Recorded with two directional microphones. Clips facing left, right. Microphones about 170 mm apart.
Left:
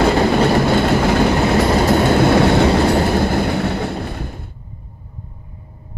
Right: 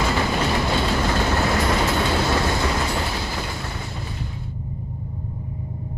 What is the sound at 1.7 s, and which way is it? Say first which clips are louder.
Vehicle: left 7 dB; 40° left (ahead or behind).